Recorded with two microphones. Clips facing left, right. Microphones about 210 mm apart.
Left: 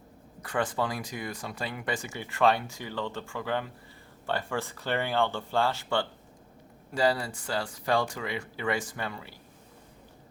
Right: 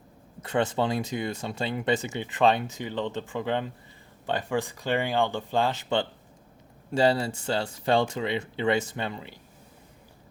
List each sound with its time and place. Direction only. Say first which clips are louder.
0.4 s speech: right 4 dB; 25° right (ahead or behind)